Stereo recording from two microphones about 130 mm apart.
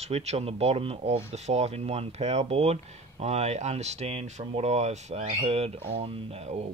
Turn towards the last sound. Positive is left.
turn(degrees=-55)  # may be behind; listen again after turning